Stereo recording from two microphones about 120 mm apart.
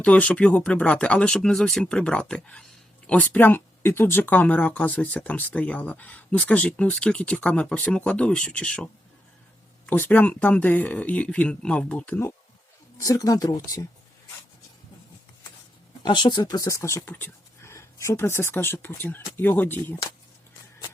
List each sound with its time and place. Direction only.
0.0 s speech: 10° left (ahead or behind)
13.0 s speech: 30° left (ahead or behind)
16.0 s speech: 40° left (ahead or behind); by 20.0 s 15° left (ahead or behind)